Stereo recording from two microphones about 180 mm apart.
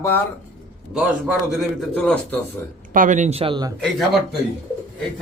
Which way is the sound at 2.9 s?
45° right (ahead or behind).